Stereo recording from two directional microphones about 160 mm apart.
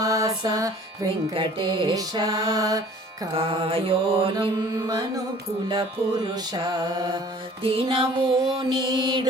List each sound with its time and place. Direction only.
0.0 s music: 20° right (ahead or behind)
1.4 s mantra: 30° right (ahead or behind)
3.3 s mantra: 35° right (ahead or behind)
7.6 s mantra: 35° right (ahead or behind)